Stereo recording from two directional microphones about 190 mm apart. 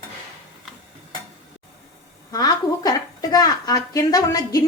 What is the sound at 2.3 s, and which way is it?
A woman's voice, 20° left (ahead or behind).